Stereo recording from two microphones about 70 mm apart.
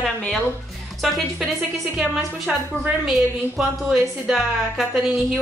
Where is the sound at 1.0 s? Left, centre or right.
Centre.